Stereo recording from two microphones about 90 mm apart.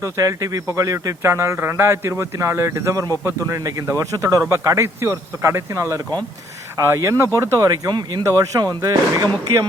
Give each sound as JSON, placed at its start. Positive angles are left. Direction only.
{"t": 0.0, "sound": "speech", "side_deg": -40}